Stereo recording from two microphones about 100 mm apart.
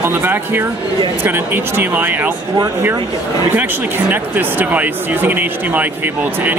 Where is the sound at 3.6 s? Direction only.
15° right (ahead or behind).